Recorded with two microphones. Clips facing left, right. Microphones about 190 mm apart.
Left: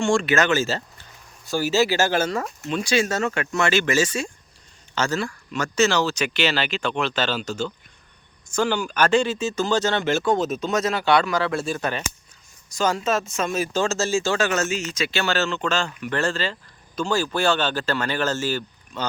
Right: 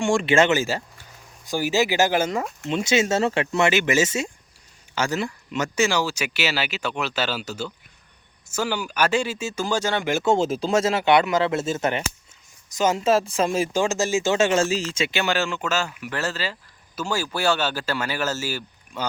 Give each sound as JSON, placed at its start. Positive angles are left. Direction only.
{"t": 0.0, "sound": "speech", "side_deg": -15}
{"t": 10.2, "sound": "speech", "side_deg": -25}
{"t": 13.7, "sound": "speech", "side_deg": -15}